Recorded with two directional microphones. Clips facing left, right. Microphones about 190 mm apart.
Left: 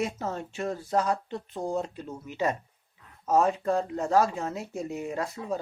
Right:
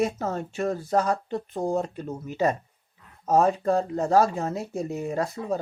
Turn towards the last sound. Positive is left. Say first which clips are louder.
# right 4 dB
turn(degrees=-40)  # may be behind; listen again after turning